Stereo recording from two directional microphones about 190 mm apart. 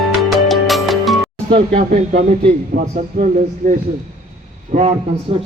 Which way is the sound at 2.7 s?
45° right (ahead or behind).